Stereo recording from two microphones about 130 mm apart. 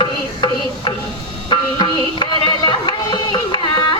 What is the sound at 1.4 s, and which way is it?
Music, 35° left (ahead or behind).